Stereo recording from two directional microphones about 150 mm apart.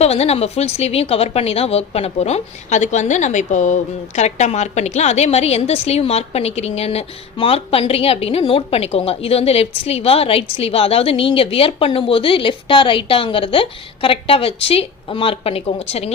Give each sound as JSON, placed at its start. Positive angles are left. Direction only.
{"t": 0.0, "sound": "a woman's voice", "side_deg": 45}